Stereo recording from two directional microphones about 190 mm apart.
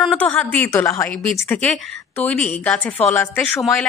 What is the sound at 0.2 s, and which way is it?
A woman's voice, 10° left (ahead or behind).